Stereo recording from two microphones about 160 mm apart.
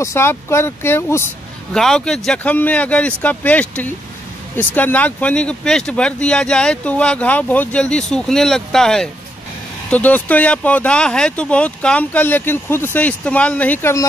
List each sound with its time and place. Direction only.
0.0 s speech: 15° left (ahead or behind)
1.7 s speech: 5° left (ahead or behind)